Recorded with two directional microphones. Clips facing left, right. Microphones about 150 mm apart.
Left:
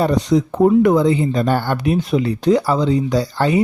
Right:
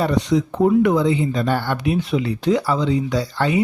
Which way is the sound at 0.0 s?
40° left (ahead or behind).